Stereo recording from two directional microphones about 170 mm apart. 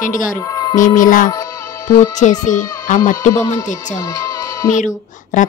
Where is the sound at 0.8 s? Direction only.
50° left (ahead or behind).